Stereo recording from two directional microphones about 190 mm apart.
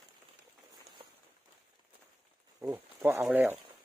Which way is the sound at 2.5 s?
10° right (ahead or behind).